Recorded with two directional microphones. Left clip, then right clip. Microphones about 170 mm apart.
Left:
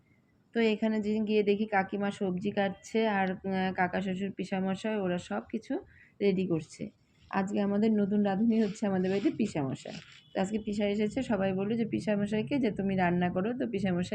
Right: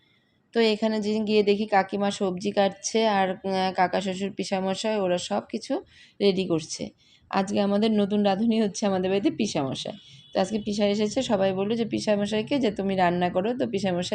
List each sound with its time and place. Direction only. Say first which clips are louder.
0.5 s a woman's voice: right 6 dB; 35° right (ahead or behind)
7.3 s a woman's voice: right 7 dB; 50° right (ahead or behind)
10.3 s a woman's voice: right 7 dB; 30° right (ahead or behind)